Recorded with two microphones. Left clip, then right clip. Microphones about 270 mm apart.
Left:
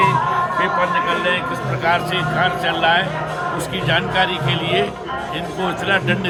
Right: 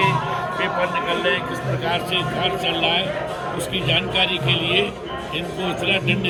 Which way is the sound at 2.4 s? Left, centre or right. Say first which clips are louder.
Left 6 dB; left.